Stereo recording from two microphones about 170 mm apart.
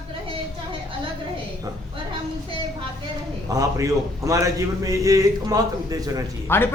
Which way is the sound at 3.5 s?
20° right (ahead or behind).